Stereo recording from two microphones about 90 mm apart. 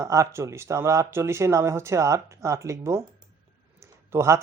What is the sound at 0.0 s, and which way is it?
Speech, 35° right (ahead or behind).